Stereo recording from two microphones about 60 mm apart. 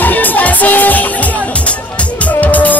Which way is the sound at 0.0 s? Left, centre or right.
Left.